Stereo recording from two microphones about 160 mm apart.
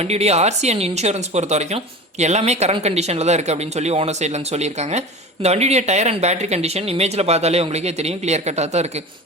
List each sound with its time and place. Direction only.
0.0 s speech: 40° right (ahead or behind)